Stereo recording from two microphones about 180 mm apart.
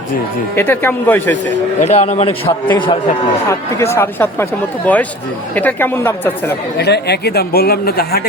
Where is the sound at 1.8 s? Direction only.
35° left (ahead or behind).